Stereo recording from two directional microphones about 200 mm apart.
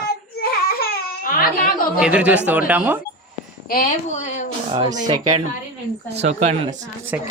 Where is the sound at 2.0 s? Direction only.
5° right (ahead or behind).